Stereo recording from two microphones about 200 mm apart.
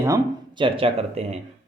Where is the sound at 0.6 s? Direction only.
30° right (ahead or behind).